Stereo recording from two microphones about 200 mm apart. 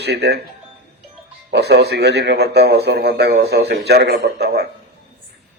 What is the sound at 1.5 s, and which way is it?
A man's voice, 55° right (ahead or behind).